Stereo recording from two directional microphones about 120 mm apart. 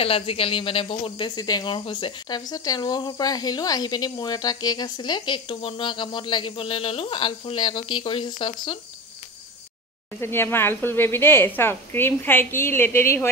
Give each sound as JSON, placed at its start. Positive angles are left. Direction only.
{"t": 0.0, "sound": "speech", "side_deg": 50}
{"t": 10.2, "sound": "a woman's voice", "side_deg": 20}